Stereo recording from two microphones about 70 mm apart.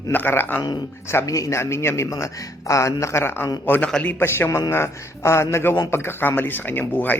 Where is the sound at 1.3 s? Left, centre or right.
Left.